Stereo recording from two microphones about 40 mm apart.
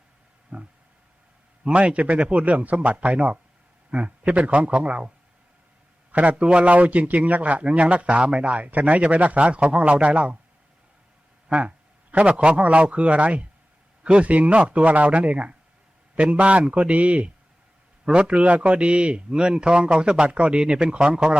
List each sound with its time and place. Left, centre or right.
0.5 s a sound: right
1.6 s a man's voice: right
11.4 s a man's voice: right